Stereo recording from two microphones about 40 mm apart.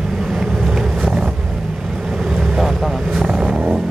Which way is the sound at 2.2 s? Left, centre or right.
Centre.